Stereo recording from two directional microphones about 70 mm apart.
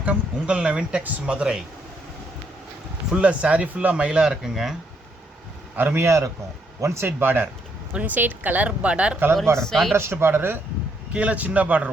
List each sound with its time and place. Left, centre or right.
0.0 s speech: centre
3.1 s speech: centre
5.7 s speech: right
6.0 s a man's voice: right; by 9.1 s centre
9.6 s speech: centre
9.9 s speech: right
11.1 s a man's voice: centre